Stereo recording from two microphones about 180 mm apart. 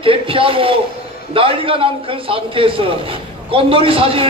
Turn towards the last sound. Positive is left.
turn(degrees=-30)  # may be behind; listen again after turning